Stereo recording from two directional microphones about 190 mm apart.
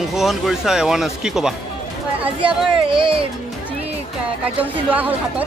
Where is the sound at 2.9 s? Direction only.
25° right (ahead or behind).